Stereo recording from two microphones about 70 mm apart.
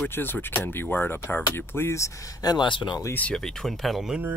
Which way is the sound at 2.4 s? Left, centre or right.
Left.